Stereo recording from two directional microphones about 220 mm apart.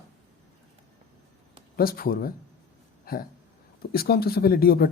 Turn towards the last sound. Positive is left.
turn(degrees=45)  # may be behind; listen again after turning